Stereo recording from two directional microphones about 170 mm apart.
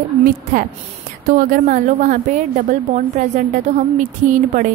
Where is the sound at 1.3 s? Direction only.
50° right (ahead or behind).